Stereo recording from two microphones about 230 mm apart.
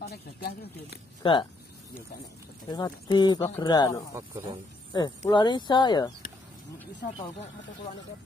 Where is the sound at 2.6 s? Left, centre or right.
Centre.